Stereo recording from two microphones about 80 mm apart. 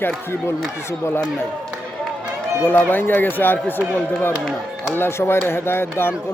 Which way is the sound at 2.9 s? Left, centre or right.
Left.